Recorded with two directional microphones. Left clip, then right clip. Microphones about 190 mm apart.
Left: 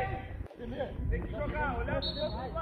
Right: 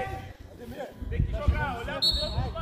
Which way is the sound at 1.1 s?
65° right (ahead or behind).